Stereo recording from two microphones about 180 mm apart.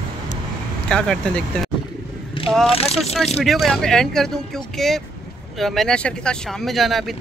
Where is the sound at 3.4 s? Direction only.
Centre (ahead or behind).